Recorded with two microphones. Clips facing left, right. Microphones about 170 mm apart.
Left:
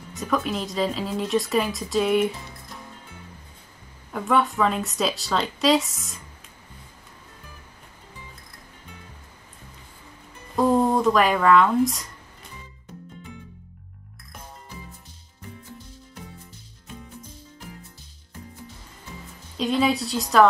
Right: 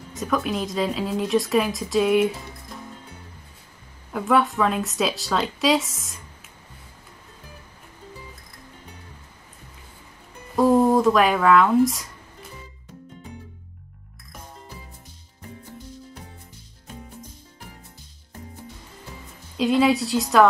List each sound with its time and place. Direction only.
0.1 s speech: centre (ahead or behind)
4.1 s speech: centre (ahead or behind)
10.5 s speech: centre (ahead or behind)
19.5 s speech: centre (ahead or behind)